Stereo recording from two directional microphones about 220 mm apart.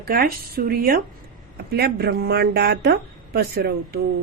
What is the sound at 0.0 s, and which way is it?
A woman's voice, 45° right (ahead or behind).